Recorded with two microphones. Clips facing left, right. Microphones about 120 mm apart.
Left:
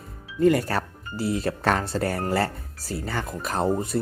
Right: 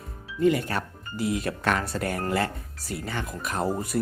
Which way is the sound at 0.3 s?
40° left (ahead or behind).